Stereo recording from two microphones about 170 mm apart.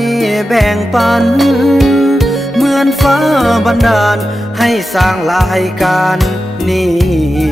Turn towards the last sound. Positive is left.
turn(degrees=0)  # may be behind; listen again after turning